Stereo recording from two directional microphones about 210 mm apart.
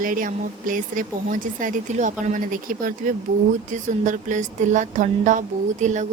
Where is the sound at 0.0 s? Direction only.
40° right (ahead or behind).